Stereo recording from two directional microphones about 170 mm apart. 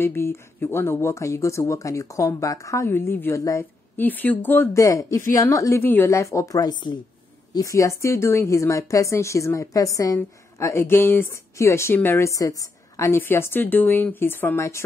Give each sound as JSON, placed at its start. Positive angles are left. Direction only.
{"t": 0.0, "sound": "speech", "side_deg": 15}